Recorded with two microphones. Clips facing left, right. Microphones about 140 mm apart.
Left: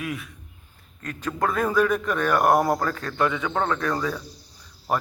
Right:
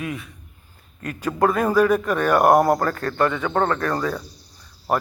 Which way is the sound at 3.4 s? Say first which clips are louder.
Right 3 dB; 45° right (ahead or behind).